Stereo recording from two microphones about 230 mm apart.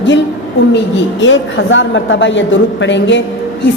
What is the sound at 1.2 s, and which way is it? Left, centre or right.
A woman's voice, left.